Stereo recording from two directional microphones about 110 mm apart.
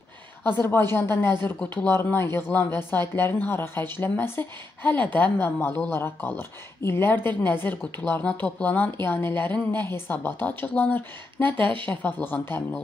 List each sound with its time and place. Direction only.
0.4 s speech: 20° left (ahead or behind)
11.5 s speech: 50° right (ahead or behind)
11.8 s speech: 15° left (ahead or behind)